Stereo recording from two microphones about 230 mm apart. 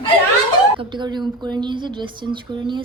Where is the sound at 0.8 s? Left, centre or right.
Centre.